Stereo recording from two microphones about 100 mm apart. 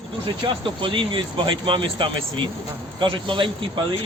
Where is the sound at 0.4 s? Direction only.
60° right (ahead or behind).